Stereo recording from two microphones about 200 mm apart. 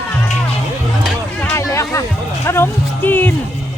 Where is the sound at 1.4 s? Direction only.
15° left (ahead or behind).